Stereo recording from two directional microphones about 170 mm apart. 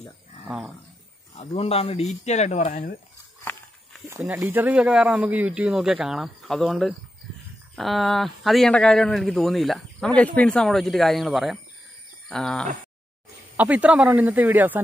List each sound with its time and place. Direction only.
1.5 s speech: 35° left (ahead or behind); by 3.0 s 50° left (ahead or behind)
4.2 s a man's voice: 10° right (ahead or behind)
13.6 s speech: 10° right (ahead or behind)